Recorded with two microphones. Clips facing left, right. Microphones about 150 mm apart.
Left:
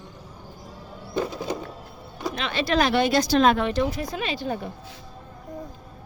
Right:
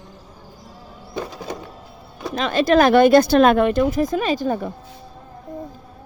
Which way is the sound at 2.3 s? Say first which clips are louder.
Right 8 dB; 45° right (ahead or behind).